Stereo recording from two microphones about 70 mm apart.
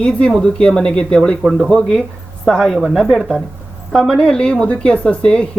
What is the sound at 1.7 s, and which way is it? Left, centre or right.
Speech, centre.